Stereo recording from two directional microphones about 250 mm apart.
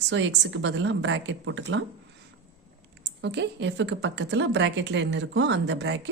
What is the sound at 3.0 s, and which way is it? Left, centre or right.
A woman's voice, right.